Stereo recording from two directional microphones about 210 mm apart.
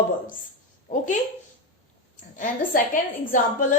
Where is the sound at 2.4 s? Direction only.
40° left (ahead or behind).